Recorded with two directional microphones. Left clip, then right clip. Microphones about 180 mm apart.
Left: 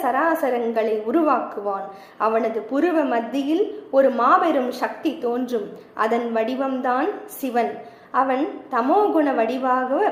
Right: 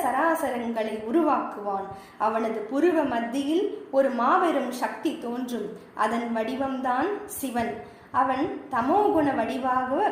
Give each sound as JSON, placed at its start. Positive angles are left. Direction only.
{"t": 0.0, "sound": "a woman's voice", "side_deg": 15}